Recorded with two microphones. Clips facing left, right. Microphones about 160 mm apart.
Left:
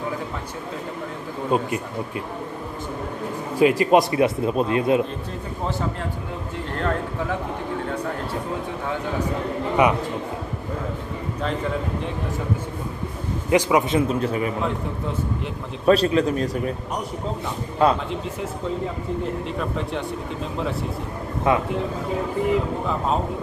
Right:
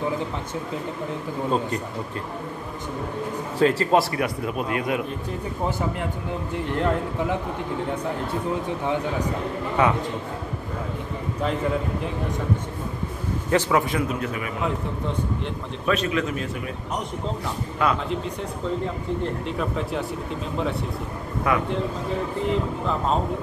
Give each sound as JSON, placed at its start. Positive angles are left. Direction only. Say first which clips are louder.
{"t": 1.5, "sound": "speech", "louder": "left 4 dB", "side_deg": 15}
{"t": 3.5, "sound": "a man's voice", "louder": "left 3 dB", "side_deg": 15}
{"t": 6.5, "sound": "a man's voice", "louder": "right 2 dB", "side_deg": -20}
{"t": 9.8, "sound": "speech", "louder": "left 2 dB", "side_deg": 15}
{"t": 13.5, "sound": "a man's voice", "louder": "left 3 dB", "side_deg": 15}
{"t": 15.8, "sound": "a man's voice", "louder": "left 7 dB", "side_deg": 35}
{"t": 17.8, "sound": "a man's voice", "louder": "left 5 dB", "side_deg": 30}
{"t": 19.4, "sound": "speech", "louder": "even", "side_deg": 0}
{"t": 21.5, "sound": "a man's voice", "louder": "left 3 dB", "side_deg": 25}